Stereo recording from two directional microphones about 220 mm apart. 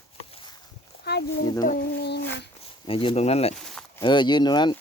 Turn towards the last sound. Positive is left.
turn(degrees=20)  # may be behind; listen again after turning